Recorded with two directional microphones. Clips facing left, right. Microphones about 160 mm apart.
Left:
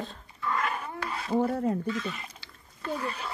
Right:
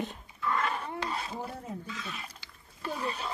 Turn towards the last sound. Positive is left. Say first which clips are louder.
# left 2 dB
turn(degrees=-15)  # may be behind; listen again after turning